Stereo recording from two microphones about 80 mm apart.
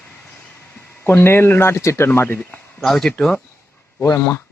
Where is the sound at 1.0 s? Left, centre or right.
Left.